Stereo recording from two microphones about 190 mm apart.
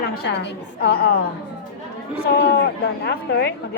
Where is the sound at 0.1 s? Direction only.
60° left (ahead or behind).